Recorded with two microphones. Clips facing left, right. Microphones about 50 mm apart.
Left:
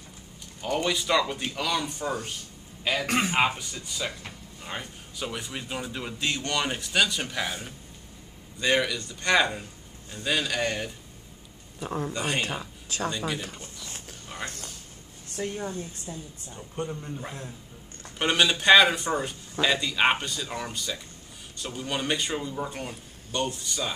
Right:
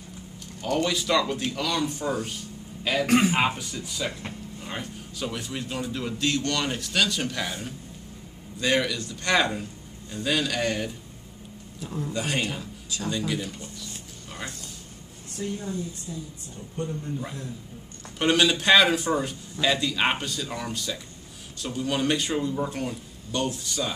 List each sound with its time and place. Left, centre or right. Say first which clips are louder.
0.6 s speech: right 2 dB; centre
11.8 s a woman's voice: left 3 dB; left
12.1 s speech: right 3 dB; centre
12.9 s speech: left 4 dB; left
15.2 s a woman's voice: even; left
16.5 s speech: right 1 dB; left
18.0 s speech: right 2 dB; centre